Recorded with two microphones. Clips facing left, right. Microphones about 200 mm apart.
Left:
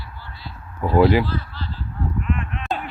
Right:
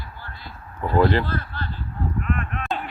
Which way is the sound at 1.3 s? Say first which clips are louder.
Even; 55° right (ahead or behind).